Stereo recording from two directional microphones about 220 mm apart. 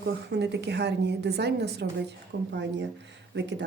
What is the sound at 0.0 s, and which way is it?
A woman's voice, 50° right (ahead or behind).